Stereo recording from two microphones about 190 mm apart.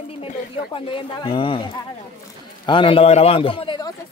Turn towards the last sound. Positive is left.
turn(degrees=25)  # may be behind; listen again after turning